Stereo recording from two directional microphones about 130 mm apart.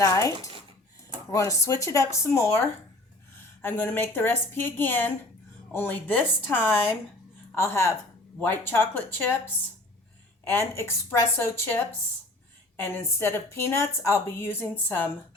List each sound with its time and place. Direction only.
0.0 s a woman's voice: 25° left (ahead or behind)
3.6 s a woman's voice: 15° left (ahead or behind)
10.4 s a woman's voice: 20° left (ahead or behind)
12.8 s a woman's voice: 20° left (ahead or behind)